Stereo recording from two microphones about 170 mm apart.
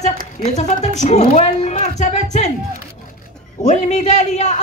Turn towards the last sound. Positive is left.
turn(degrees=45)  # may be behind; listen again after turning